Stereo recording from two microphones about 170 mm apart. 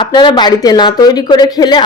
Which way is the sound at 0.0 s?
25° left (ahead or behind).